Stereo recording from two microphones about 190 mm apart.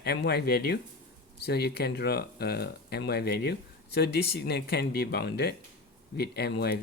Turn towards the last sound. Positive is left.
turn(degrees=60)  # may be behind; listen again after turning